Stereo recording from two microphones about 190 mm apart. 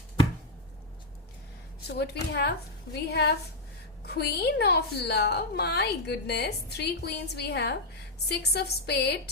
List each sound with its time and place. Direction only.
1.9 s a woman's voice: 60° left (ahead or behind)